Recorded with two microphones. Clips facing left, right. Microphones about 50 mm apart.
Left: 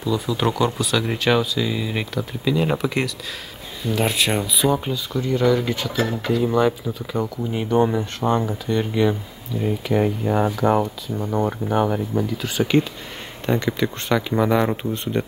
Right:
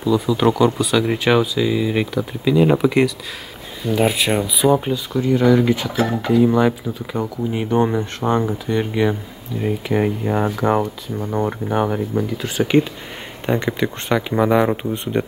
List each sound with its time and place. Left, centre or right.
0.0 s speech: centre
12.4 s speech: right